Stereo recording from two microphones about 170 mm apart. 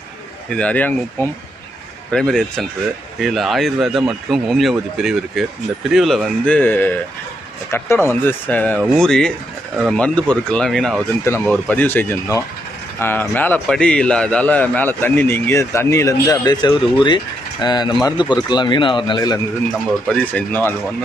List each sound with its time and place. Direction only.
0.5 s a man's voice: 10° left (ahead or behind); by 19.4 s 25° left (ahead or behind)
20.1 s a man's voice: 10° left (ahead or behind)